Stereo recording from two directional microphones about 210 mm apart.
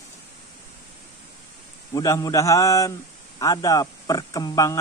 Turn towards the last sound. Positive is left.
turn(degrees=15)  # may be behind; listen again after turning